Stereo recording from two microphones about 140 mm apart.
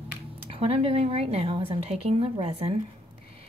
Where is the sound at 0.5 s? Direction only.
45° right (ahead or behind).